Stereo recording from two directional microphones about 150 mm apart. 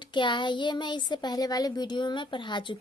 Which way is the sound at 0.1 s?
30° left (ahead or behind).